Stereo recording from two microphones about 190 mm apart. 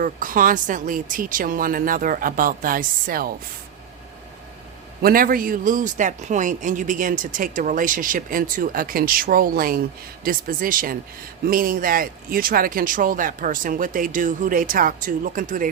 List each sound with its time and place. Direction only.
0.0 s speech: 45° right (ahead or behind)
5.0 s speech: 50° right (ahead or behind)